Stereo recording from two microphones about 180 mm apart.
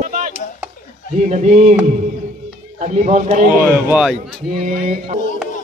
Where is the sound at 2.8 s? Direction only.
40° right (ahead or behind).